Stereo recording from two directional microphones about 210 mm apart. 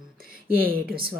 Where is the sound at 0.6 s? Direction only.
45° right (ahead or behind).